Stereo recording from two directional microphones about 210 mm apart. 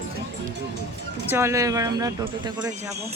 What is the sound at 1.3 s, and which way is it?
Speech, 10° right (ahead or behind).